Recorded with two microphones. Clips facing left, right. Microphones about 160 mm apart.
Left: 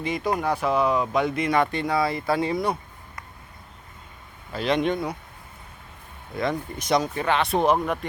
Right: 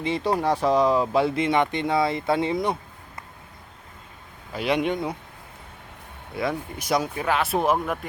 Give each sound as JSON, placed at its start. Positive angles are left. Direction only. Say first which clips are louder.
{"t": 0.0, "sound": "speech", "louder": "right 2 dB", "side_deg": -30}
{"t": 4.5, "sound": "speech", "louder": "left 1 dB", "side_deg": -10}
{"t": 6.3, "sound": "speech", "louder": "left 1 dB", "side_deg": -5}